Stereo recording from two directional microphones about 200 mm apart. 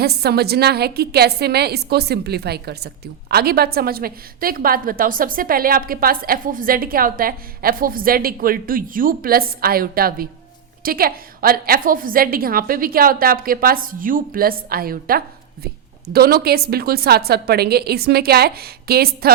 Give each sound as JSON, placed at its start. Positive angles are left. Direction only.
{"t": 0.0, "sound": "a woman's voice", "side_deg": -55}